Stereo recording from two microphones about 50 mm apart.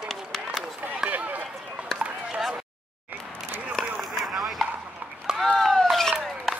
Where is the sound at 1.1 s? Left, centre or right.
Right.